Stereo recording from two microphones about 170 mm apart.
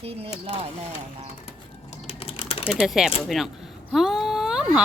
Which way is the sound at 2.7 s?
Centre (ahead or behind).